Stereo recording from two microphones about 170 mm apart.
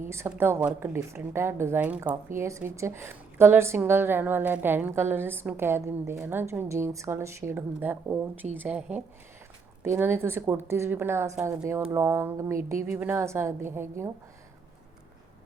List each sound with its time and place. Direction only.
0.1 s a woman's voice: 15° right (ahead or behind)